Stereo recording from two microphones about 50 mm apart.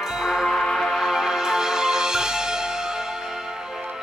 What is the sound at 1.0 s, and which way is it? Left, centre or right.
Music, centre.